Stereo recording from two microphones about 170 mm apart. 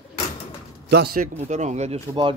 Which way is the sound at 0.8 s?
75° right (ahead or behind).